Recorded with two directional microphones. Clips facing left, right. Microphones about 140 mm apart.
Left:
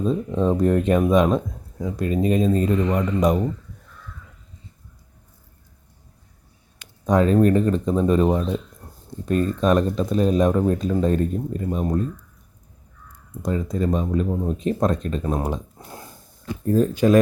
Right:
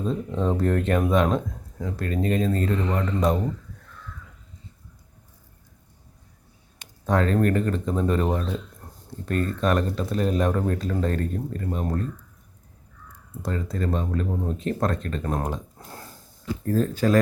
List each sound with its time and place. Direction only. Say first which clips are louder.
0.0 s speech: left 4 dB; 15° left (ahead or behind)
7.0 s speech: left 5 dB; 15° left (ahead or behind)
13.4 s speech: left 5 dB; 15° left (ahead or behind)